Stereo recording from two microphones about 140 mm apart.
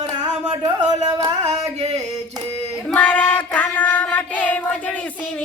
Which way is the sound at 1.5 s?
50° right (ahead or behind).